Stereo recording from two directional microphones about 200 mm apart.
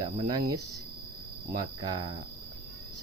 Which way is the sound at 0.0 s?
20° right (ahead or behind).